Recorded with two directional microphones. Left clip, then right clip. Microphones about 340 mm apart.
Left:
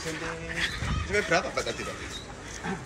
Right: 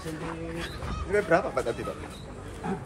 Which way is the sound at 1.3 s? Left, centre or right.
Centre.